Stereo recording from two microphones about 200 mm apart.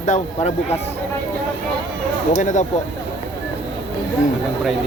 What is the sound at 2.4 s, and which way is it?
Speech, 40° left (ahead or behind).